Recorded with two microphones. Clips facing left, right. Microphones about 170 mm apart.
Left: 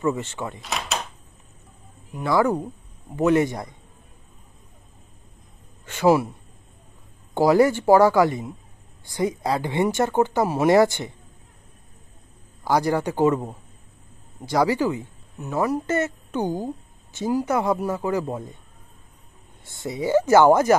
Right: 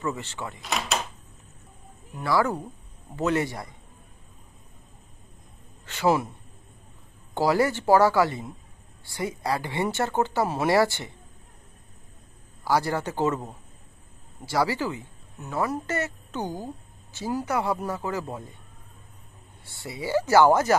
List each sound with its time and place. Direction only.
0.0 s speech: 20° left (ahead or behind)
0.6 s speech: centre (ahead or behind)
2.1 s speech: 15° left (ahead or behind)
5.9 s speech: 15° left (ahead or behind)
7.3 s speech: 15° left (ahead or behind)
12.6 s speech: 15° left (ahead or behind)
19.6 s speech: 20° left (ahead or behind)